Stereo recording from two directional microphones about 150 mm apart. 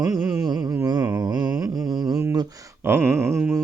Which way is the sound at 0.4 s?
25° right (ahead or behind).